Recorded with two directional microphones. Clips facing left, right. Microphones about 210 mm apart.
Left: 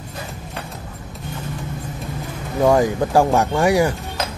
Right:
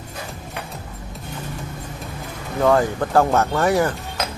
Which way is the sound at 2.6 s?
15° left (ahead or behind).